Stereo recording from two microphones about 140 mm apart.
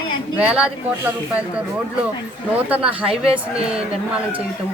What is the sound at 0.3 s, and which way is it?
Speech, 10° right (ahead or behind).